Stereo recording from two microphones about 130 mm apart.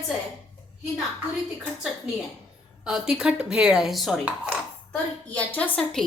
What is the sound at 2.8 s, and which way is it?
A woman's voice, 5° right (ahead or behind).